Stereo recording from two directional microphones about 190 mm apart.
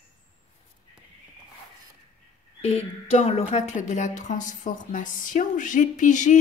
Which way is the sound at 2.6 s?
35° left (ahead or behind).